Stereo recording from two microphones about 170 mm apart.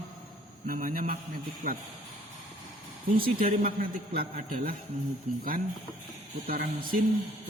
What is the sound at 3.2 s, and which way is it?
Mantra, 60° right (ahead or behind).